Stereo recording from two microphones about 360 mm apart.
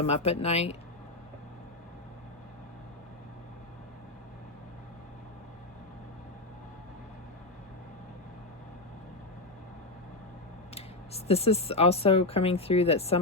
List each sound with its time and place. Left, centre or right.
0.0 s speech: centre
10.8 s speech: centre